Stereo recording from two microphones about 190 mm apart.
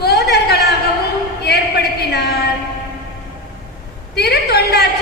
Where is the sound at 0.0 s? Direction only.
60° left (ahead or behind).